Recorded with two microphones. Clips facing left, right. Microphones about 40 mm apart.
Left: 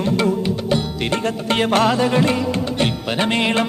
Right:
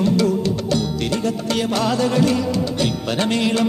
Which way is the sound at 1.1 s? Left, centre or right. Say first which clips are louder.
Left 1 dB; left.